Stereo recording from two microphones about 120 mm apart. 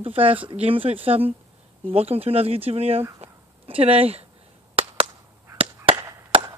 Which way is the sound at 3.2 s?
55° right (ahead or behind).